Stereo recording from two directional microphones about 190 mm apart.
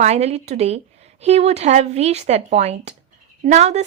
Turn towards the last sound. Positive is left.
turn(degrees=-35)  # may be behind; listen again after turning